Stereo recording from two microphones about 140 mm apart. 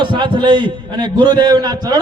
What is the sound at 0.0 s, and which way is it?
A man's voice, 35° right (ahead or behind).